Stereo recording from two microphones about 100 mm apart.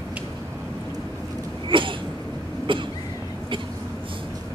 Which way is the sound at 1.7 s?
55° right (ahead or behind).